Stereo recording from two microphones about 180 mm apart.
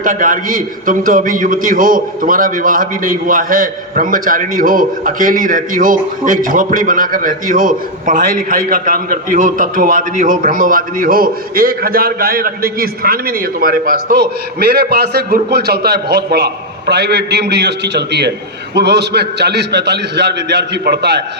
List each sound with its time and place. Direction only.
0.0 s a man's voice: 50° right (ahead or behind); by 21.2 s 65° right (ahead or behind)